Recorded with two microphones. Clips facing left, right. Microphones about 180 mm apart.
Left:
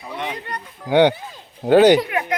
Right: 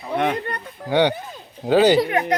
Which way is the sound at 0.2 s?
55° right (ahead or behind).